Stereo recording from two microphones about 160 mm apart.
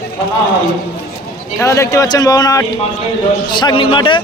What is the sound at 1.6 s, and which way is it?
A man's voice, 20° left (ahead or behind).